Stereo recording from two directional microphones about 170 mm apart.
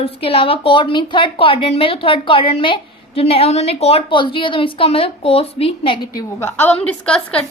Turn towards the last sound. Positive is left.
turn(degrees=10)  # may be behind; listen again after turning